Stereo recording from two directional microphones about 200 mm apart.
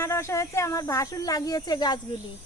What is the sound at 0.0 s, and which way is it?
Speech, 15° left (ahead or behind).